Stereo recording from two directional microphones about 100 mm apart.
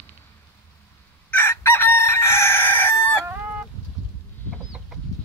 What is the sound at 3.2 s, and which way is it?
Fowl, 20° right (ahead or behind).